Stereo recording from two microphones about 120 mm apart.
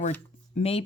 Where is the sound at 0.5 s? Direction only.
55° left (ahead or behind).